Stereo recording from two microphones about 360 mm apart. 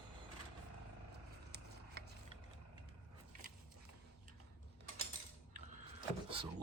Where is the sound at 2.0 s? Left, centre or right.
Right.